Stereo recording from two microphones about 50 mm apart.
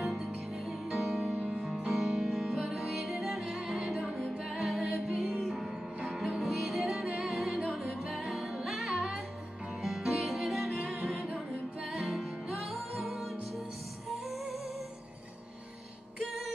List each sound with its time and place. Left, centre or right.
0.0 s music: centre